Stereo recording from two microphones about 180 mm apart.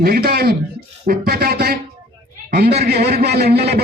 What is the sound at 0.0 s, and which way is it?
A man's voice, 60° right (ahead or behind).